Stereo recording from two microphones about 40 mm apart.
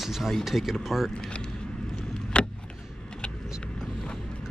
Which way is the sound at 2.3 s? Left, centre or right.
Left.